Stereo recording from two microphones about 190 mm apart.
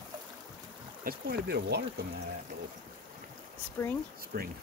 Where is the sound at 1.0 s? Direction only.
55° right (ahead or behind).